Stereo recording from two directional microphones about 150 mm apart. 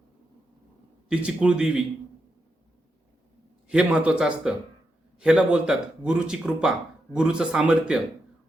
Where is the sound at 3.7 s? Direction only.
5° right (ahead or behind).